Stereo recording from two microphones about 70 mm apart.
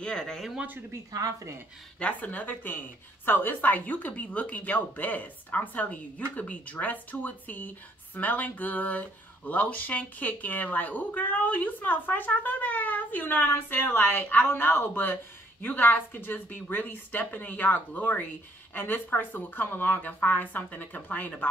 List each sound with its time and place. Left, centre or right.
0.0 s speech: centre
2.0 s speech: left